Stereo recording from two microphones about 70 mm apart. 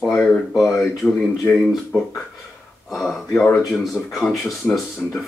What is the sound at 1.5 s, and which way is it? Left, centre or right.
Speech, left.